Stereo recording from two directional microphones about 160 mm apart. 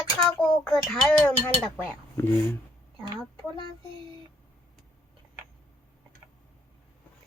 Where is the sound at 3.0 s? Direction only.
25° right (ahead or behind).